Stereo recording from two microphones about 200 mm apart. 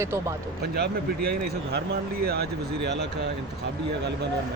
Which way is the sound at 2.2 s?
50° right (ahead or behind).